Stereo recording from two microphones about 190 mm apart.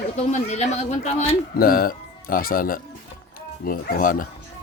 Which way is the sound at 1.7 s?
50° left (ahead or behind).